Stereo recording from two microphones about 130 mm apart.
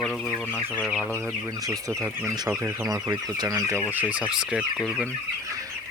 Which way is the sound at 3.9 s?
10° right (ahead or behind).